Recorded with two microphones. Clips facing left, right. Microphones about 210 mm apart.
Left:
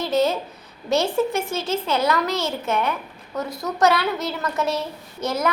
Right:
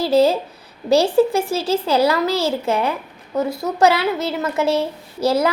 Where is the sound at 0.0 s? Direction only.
30° right (ahead or behind).